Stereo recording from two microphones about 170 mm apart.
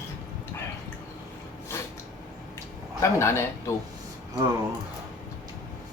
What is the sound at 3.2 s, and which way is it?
Speech, 15° left (ahead or behind).